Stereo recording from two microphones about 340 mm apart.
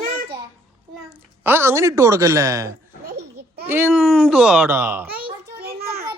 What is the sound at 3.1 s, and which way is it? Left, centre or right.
Babbling, right.